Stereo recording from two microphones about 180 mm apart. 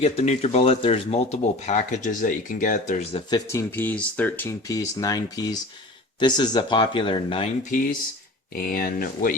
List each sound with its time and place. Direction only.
0.0 s speech: 35° left (ahead or behind)
7.7 s speech: 50° left (ahead or behind)